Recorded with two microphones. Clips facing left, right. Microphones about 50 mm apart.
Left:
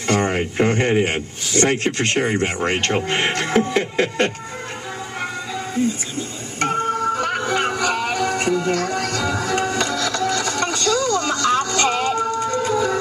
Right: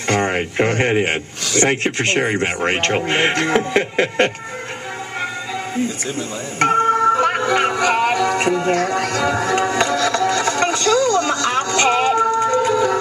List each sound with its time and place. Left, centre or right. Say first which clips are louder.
0.2 s a sound: right 1 dB; right
0.8 s speech: right 1 dB; right
6.1 s music: right 4 dB; right